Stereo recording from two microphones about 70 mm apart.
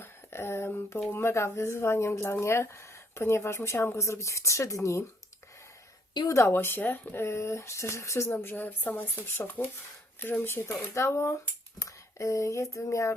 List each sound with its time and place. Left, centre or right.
0.0 s speech: left
6.3 s speech: left